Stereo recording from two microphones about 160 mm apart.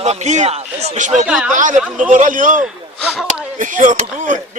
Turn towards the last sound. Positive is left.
turn(degrees=-55)  # may be behind; listen again after turning